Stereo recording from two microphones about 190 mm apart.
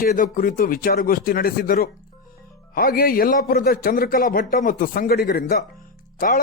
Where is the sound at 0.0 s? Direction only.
50° left (ahead or behind).